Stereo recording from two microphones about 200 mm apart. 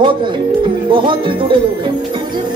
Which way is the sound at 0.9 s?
25° right (ahead or behind).